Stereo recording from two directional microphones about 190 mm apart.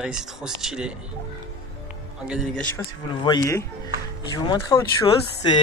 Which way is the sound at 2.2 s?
5° right (ahead or behind).